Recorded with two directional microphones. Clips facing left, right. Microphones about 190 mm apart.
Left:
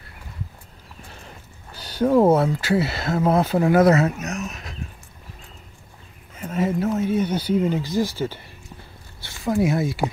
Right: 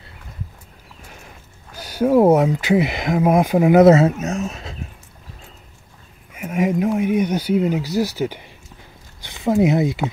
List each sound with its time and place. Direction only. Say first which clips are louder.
1.7 s speech: right 2 dB; 10° right (ahead or behind); by 4.7 s 30° right (ahead or behind)
6.3 s a sound: right 3 dB; 10° right (ahead or behind)
7.0 s speech: right 3 dB; 15° right (ahead or behind)